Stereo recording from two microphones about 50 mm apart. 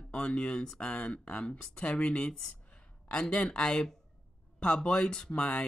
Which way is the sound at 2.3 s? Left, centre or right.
Centre.